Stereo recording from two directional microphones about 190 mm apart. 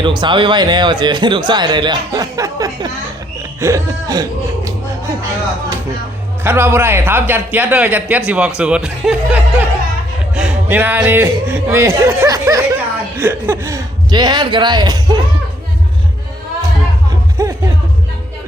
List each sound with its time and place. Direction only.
0.0 s a man's voice: 25° right (ahead or behind)
6.4 s a man's voice: 10° right (ahead or behind)
17.4 s music: 15° right (ahead or behind)